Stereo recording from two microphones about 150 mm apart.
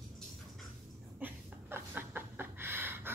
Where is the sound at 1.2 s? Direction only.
15° right (ahead or behind).